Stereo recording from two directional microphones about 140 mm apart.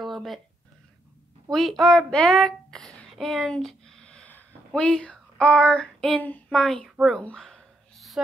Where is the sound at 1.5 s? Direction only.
Centre (ahead or behind).